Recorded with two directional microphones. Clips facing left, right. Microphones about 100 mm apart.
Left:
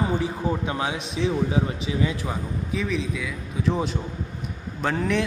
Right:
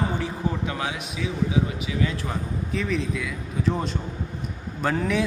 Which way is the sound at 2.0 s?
15° left (ahead or behind).